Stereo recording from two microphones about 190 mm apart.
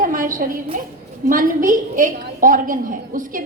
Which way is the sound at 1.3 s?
45° right (ahead or behind).